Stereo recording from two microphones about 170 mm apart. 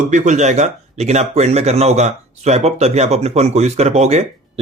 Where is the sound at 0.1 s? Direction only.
45° right (ahead or behind).